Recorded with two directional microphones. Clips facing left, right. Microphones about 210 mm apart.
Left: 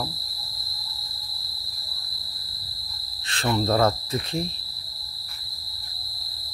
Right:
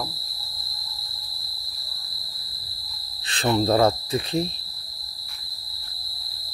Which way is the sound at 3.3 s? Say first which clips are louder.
Right 3 dB; 20° right (ahead or behind).